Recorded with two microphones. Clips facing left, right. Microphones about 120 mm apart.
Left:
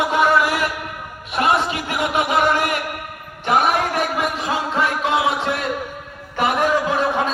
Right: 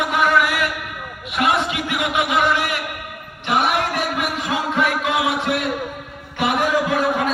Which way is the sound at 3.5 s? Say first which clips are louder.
Left 2 dB; 40° left (ahead or behind).